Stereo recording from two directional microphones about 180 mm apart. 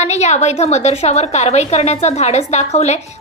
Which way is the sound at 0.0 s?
40° left (ahead or behind).